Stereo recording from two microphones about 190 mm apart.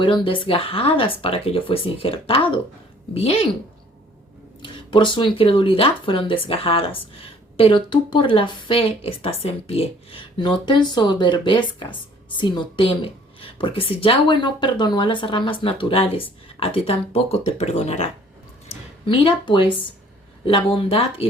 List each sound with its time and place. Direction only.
0.0 s speech: 25° left (ahead or behind)
4.6 s speech: 25° left (ahead or behind)